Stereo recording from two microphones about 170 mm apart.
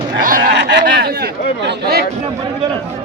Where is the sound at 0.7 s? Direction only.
85° right; by 2.0 s 65° right (ahead or behind).